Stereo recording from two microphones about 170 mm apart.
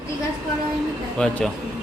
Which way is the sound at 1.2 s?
5° left (ahead or behind).